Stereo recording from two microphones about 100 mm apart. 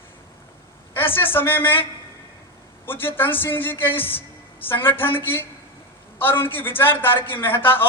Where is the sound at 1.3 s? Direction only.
20° left (ahead or behind).